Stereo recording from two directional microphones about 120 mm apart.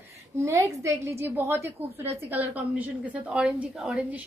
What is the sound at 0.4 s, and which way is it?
A woman's voice, 25° right (ahead or behind).